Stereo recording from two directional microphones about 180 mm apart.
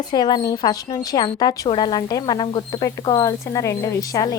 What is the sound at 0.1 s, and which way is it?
Speech, 25° left (ahead or behind).